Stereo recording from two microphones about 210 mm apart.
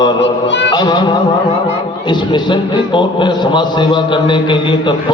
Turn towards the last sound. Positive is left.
turn(degrees=20)  # may be behind; listen again after turning